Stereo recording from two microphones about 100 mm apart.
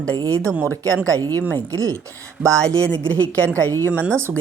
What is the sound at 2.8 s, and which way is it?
Speech, 15° left (ahead or behind).